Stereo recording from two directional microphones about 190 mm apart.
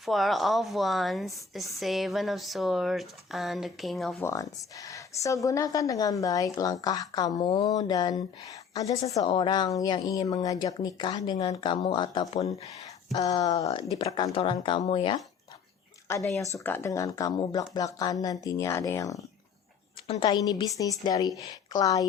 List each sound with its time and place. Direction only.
0.0 s a woman's voice: centre (ahead or behind)
4.2 s a woman's voice: 15° left (ahead or behind); by 12.5 s 30° left (ahead or behind)
13.4 s speech: 20° left (ahead or behind)
16.0 s speech: 15° left (ahead or behind)